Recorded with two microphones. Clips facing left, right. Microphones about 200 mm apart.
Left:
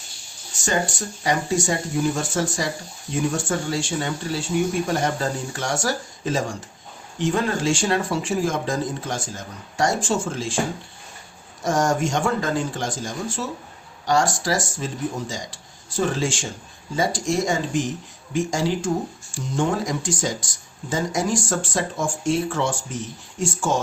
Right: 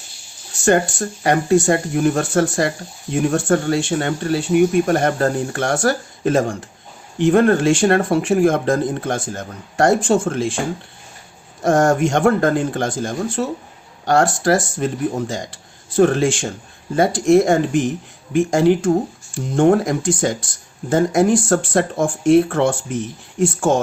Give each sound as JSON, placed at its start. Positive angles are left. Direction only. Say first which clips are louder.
{"t": 0.5, "sound": "speech", "louder": "right 8 dB", "side_deg": -60}
{"t": 11.6, "sound": "speech", "louder": "right 6 dB", "side_deg": -60}